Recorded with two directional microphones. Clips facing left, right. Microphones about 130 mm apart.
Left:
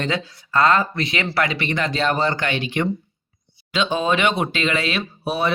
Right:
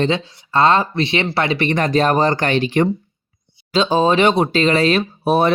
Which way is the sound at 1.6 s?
40° right (ahead or behind).